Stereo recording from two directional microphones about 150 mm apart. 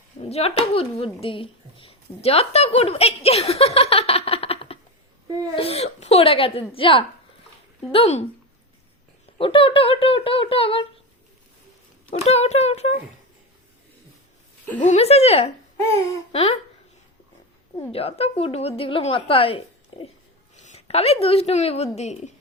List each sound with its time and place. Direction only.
0.3 s speech: 40° left (ahead or behind)
9.4 s speech: 35° left (ahead or behind)
12.2 s speech: 45° left (ahead or behind)
14.8 s speech: 50° left (ahead or behind)
17.9 s speech: 40° left (ahead or behind)
20.6 s a woman's voice: 50° left (ahead or behind)